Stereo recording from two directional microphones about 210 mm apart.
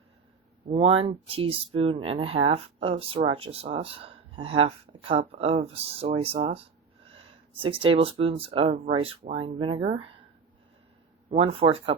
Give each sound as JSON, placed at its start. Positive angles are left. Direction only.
{"t": 0.7, "sound": "speech", "side_deg": -25}
{"t": 11.3, "sound": "speech", "side_deg": -25}